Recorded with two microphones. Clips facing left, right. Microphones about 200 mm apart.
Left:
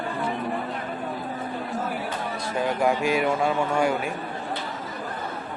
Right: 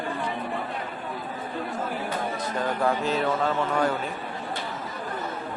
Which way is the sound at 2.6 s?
10° left (ahead or behind).